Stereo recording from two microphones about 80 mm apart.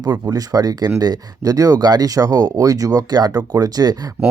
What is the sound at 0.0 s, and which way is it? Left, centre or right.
Speech, right.